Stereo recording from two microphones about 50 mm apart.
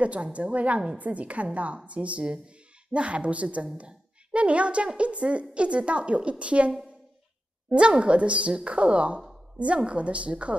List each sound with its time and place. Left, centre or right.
0.0 s a woman's voice: right
7.7 s a woman's voice: right